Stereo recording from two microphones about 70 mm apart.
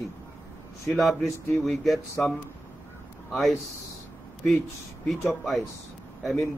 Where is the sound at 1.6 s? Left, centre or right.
Centre.